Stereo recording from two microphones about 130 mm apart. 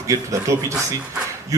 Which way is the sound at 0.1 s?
25° right (ahead or behind).